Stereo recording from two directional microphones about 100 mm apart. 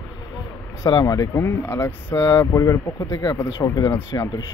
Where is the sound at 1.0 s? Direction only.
35° left (ahead or behind).